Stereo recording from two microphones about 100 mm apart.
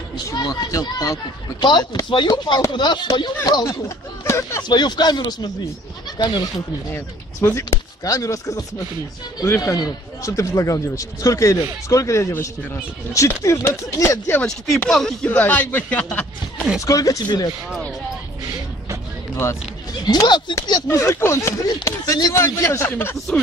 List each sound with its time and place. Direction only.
0.1 s speech: 40° left (ahead or behind)
1.6 s speech: 45° left (ahead or behind)
3.6 s speech: 30° left (ahead or behind)
4.6 s speech: 45° left (ahead or behind)
6.9 s speech: 30° left (ahead or behind)
14.9 s speech: 5° left (ahead or behind)
15.2 s speech: 15° left (ahead or behind)
16.8 s speech: 35° left (ahead or behind)
19.3 s a sound: 30° left (ahead or behind)
20.1 s speech: 45° left (ahead or behind)
20.9 s speech: 30° left (ahead or behind)